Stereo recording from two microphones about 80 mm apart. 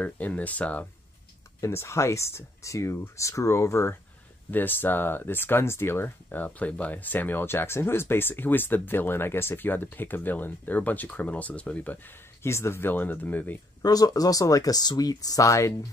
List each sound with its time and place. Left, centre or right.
0.0 s speech: centre
1.6 s speech: left
4.5 s speech: left
12.4 s speech: left
13.8 s speech: left